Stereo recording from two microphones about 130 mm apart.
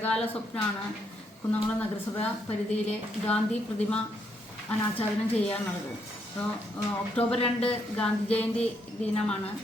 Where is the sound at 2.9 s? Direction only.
10° left (ahead or behind).